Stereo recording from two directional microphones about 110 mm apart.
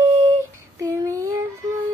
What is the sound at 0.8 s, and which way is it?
Child singing, 30° right (ahead or behind).